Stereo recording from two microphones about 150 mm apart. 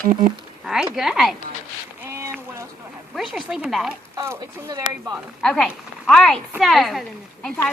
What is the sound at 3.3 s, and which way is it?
Speech, centre (ahead or behind).